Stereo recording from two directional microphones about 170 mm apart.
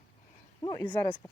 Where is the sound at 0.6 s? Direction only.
25° left (ahead or behind).